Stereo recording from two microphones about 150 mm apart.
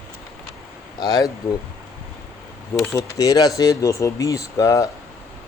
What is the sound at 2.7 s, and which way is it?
Speech, 20° left (ahead or behind).